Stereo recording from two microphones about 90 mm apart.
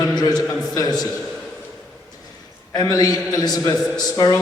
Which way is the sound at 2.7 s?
45° left (ahead or behind).